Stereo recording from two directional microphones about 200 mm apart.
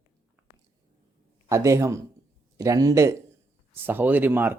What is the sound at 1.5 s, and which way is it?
Speech, 15° right (ahead or behind).